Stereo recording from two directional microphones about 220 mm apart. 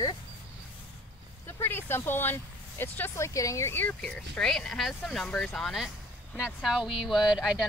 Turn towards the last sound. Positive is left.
turn(degrees=-5)  # may be behind; listen again after turning